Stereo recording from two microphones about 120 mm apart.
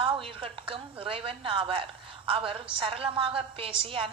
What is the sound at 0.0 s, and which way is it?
A woman's voice, 50° right (ahead or behind).